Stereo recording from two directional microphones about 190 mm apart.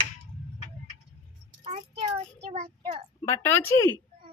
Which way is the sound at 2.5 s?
35° right (ahead or behind).